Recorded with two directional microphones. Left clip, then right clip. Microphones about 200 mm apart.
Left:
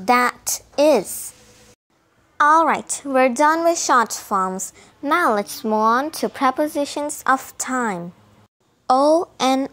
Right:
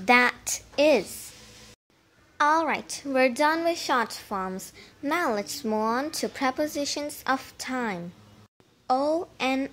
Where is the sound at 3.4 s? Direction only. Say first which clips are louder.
Left 8 dB; 25° left (ahead or behind).